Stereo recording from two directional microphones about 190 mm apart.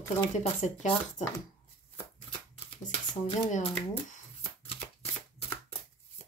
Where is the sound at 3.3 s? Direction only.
40° left (ahead or behind).